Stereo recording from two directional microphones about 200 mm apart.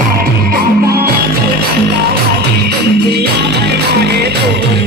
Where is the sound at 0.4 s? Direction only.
45° right (ahead or behind).